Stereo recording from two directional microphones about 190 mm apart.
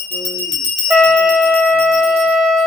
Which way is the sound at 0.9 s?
5° left (ahead or behind).